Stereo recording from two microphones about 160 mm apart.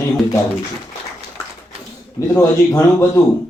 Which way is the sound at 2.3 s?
20° left (ahead or behind).